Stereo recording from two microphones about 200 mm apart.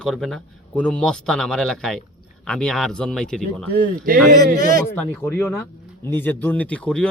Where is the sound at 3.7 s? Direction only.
45° right (ahead or behind).